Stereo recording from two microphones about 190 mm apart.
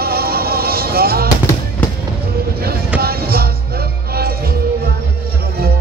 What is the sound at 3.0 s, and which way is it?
Music, 55° right (ahead or behind).